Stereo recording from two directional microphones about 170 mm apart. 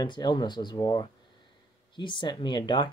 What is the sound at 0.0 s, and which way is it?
Speech, 25° left (ahead or behind).